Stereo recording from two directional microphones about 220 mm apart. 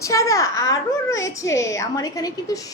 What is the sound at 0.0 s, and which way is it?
A woman's voice, 15° left (ahead or behind).